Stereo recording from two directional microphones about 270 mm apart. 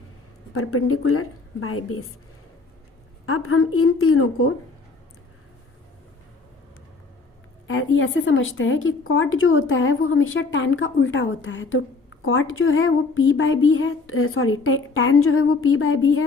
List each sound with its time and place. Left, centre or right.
0.5 s a woman's voice: left
3.2 s a woman's voice: left
7.7 s a woman's voice: left